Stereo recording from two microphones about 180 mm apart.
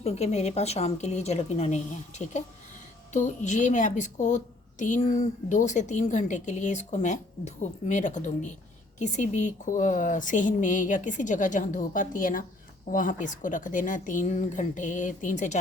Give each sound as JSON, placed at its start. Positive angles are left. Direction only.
{"t": 0.0, "sound": "a woman's voice", "side_deg": 35}